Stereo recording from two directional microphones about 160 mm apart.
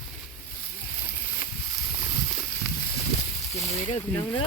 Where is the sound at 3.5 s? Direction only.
40° left (ahead or behind).